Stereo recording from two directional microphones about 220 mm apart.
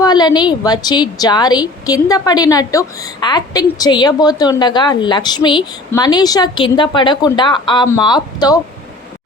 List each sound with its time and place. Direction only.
0.0 s a woman's voice: 20° left (ahead or behind)